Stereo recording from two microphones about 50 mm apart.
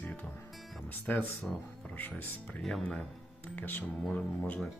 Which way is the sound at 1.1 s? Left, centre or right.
Left.